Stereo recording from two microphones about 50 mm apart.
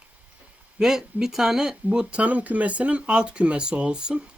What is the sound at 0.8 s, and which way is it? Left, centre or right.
Speech, centre.